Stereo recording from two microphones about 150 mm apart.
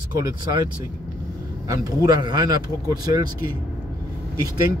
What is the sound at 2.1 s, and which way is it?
Speech, 25° right (ahead or behind).